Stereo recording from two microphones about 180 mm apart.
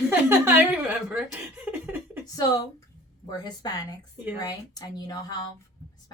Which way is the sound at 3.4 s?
20° left (ahead or behind).